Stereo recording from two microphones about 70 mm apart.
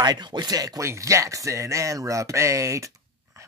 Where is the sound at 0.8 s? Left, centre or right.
Right.